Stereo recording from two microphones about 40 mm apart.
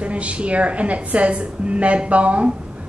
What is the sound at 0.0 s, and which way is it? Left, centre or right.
A woman's voice, right.